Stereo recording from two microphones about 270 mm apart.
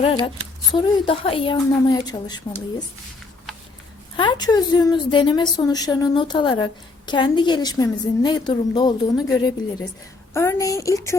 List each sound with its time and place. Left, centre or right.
0.0 s a woman's voice: centre
4.2 s a woman's voice: centre